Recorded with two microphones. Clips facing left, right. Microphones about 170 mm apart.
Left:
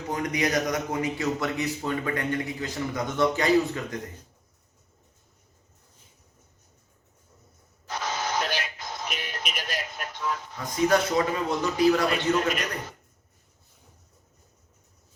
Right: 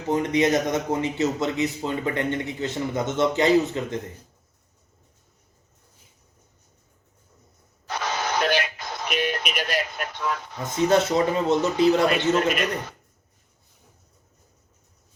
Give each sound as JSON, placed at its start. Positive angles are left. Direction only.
{"t": 0.1, "sound": "a man's voice", "side_deg": -25}
{"t": 7.9, "sound": "radio", "side_deg": -70}
{"t": 10.6, "sound": "a man's voice", "side_deg": -25}